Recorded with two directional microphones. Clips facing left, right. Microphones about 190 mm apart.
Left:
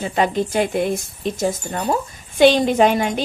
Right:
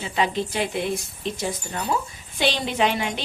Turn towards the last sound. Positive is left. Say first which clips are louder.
# left 7 dB
turn(degrees=45)  # may be behind; listen again after turning